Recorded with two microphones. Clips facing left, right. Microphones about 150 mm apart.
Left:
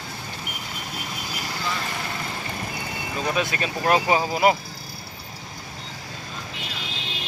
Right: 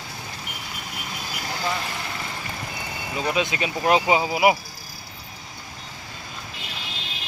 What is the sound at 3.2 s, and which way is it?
Speech, 15° right (ahead or behind).